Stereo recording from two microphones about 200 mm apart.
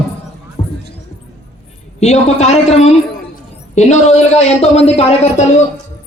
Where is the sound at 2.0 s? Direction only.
35° left (ahead or behind).